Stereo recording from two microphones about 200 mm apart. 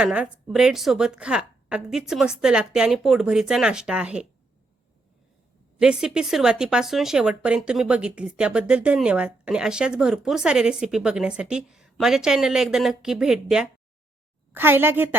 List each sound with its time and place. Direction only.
0.0 s speech: 5° right (ahead or behind)
5.8 s a woman's voice: 5° right (ahead or behind)